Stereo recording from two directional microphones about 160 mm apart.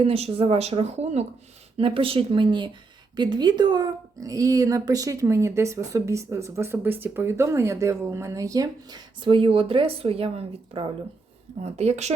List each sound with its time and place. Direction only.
0.0 s speech: 40° right (ahead or behind)